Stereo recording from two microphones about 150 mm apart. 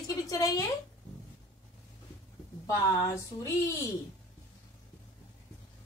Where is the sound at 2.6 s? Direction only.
20° left (ahead or behind).